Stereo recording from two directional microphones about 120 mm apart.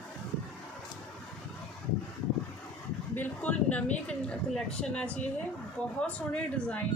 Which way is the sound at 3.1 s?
15° left (ahead or behind).